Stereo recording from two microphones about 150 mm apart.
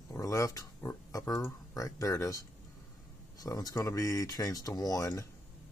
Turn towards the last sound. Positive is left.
turn(degrees=20)  # may be behind; listen again after turning